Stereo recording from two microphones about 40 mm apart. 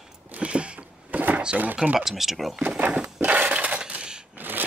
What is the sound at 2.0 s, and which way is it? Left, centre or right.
Speech, centre.